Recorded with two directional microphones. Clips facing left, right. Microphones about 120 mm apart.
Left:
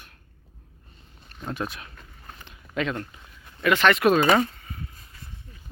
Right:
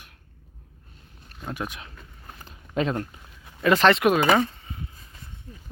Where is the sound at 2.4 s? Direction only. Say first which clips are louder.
Right 3 dB; 35° right (ahead or behind).